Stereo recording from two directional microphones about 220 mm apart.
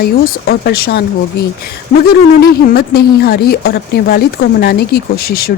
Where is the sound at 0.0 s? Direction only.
45° left (ahead or behind).